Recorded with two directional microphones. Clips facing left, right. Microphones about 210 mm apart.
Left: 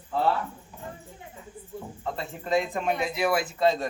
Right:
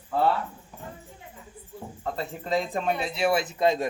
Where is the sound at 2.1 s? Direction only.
35° right (ahead or behind); by 3.8 s 15° right (ahead or behind).